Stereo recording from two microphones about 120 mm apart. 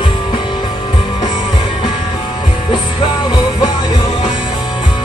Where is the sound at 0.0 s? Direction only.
45° left (ahead or behind).